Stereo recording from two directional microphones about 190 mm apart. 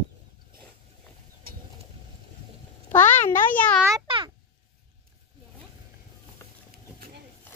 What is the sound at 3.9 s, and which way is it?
Speech, 25° right (ahead or behind).